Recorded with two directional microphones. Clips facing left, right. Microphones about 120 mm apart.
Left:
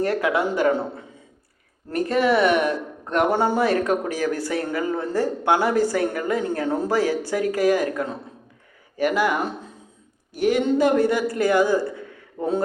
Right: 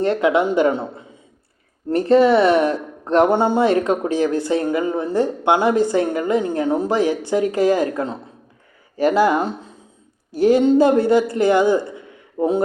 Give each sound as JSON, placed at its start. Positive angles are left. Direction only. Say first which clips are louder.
{"t": 0.0, "sound": "speech", "louder": "right 5 dB", "side_deg": -25}
{"t": 1.9, "sound": "speech", "louder": "right 6 dB", "side_deg": -30}